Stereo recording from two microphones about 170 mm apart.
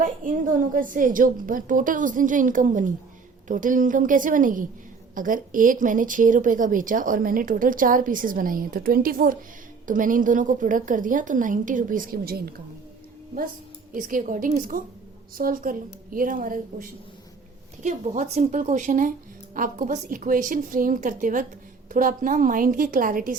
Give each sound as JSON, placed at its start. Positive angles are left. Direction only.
{"t": 0.0, "sound": "speech", "side_deg": -55}
{"t": 13.9, "sound": "a woman's voice", "side_deg": -50}